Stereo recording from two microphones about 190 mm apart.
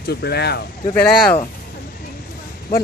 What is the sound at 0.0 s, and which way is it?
Speech, 55° left (ahead or behind).